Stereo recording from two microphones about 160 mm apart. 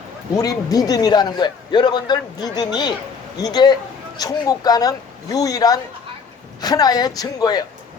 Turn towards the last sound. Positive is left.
turn(degrees=25)  # may be behind; listen again after turning